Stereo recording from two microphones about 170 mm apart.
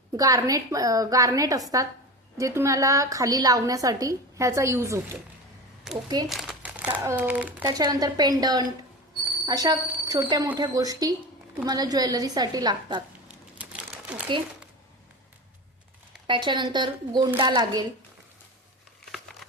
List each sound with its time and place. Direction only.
0.2 s a woman's voice: 20° right (ahead or behind)
6.2 s speech: centre (ahead or behind)
7.6 s a woman's voice: 20° right (ahead or behind)
13.2 s crumpling: 5° right (ahead or behind)
16.2 s a woman's voice: 30° right (ahead or behind)
19.1 s crumpling: centre (ahead or behind)